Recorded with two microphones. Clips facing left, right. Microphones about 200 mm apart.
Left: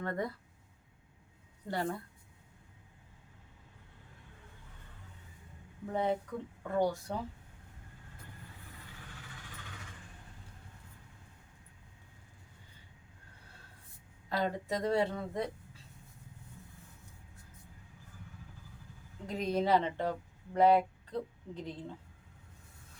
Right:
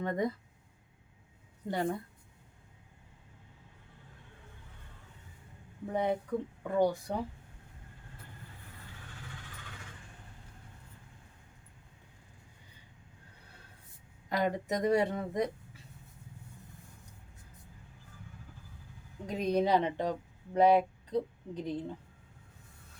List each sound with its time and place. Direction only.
0.0 s speech: 20° right (ahead or behind)
1.6 s speech: 20° right (ahead or behind)
5.9 s speech: 15° right (ahead or behind)
14.3 s speech: 20° right (ahead or behind)
19.2 s speech: 15° right (ahead or behind)